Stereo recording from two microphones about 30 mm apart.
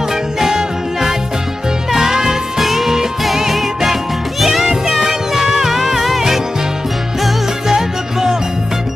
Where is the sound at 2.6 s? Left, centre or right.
Centre.